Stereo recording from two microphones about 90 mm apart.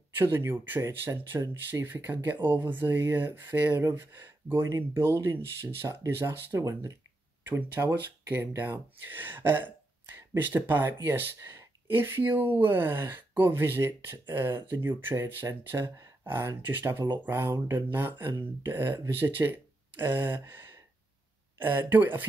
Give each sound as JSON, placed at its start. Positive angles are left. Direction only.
{"t": 0.1, "sound": "speech", "side_deg": -25}
{"t": 17.0, "sound": "speech", "side_deg": -55}
{"t": 17.3, "sound": "speech", "side_deg": -25}